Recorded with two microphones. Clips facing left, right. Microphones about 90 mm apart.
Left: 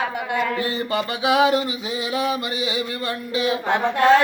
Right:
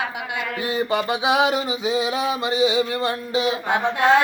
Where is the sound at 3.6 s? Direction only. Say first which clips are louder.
Left 1 dB; 15° right (ahead or behind).